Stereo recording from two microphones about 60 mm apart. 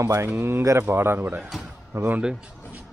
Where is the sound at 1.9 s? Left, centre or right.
Right.